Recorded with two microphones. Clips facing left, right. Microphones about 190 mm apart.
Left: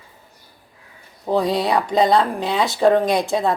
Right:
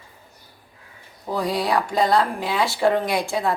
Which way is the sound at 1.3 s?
25° left (ahead or behind).